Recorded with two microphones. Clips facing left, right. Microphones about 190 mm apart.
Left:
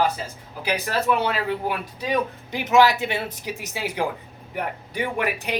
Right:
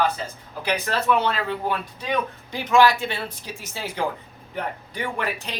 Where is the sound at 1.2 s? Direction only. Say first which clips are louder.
Even; 10° left (ahead or behind).